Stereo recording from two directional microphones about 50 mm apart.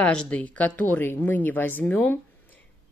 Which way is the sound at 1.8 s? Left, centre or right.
Left.